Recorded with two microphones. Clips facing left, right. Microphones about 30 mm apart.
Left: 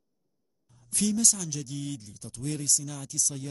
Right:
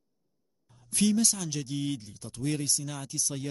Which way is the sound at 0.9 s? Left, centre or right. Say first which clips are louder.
Right 1 dB; right.